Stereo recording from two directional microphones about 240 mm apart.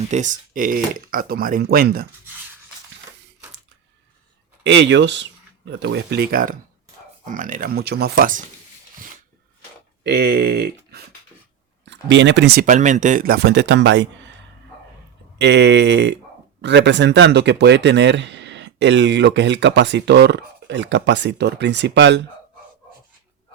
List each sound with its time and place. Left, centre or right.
0.1 s speech: right
4.6 s speech: right
10.0 s speech: right
15.4 s speech: right